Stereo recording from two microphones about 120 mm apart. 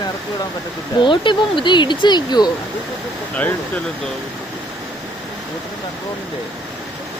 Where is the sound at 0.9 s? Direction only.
40° left (ahead or behind).